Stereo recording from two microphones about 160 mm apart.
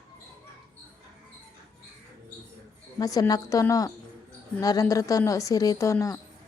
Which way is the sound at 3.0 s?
25° left (ahead or behind).